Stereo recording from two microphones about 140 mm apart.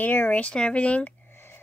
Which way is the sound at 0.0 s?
10° left (ahead or behind).